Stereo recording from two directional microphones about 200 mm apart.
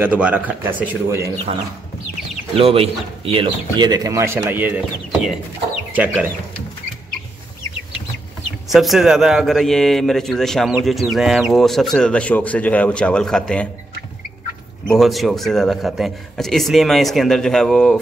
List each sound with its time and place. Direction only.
0.0 s a man's voice: 10° right (ahead or behind)
2.5 s a man's voice: 30° right (ahead or behind); by 6.3 s 10° right (ahead or behind)
8.6 s a man's voice: centre (ahead or behind)
14.9 s a man's voice: centre (ahead or behind)